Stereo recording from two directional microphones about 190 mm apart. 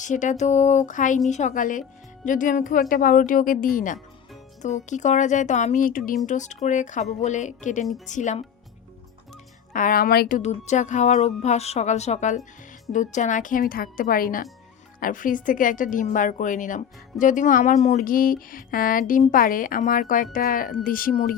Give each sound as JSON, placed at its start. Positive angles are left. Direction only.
{"t": 0.0, "sound": "speech", "side_deg": 40}
{"t": 9.7, "sound": "speech", "side_deg": 50}